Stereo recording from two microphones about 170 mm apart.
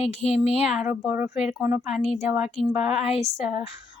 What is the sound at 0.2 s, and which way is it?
Speech, 35° left (ahead or behind).